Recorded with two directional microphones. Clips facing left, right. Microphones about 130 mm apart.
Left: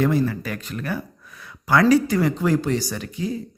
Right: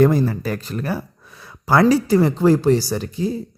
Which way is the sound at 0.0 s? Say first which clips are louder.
Right 5 dB; 40° right (ahead or behind).